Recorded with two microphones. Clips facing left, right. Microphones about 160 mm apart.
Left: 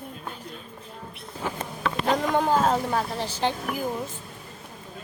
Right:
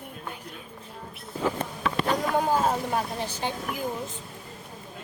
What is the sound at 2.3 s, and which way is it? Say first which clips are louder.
Speech: left 2 dB; 10° right (ahead or behind).